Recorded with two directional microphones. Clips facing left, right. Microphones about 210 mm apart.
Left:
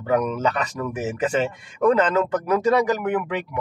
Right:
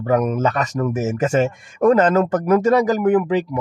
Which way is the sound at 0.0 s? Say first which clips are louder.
Right 3 dB; 45° right (ahead or behind).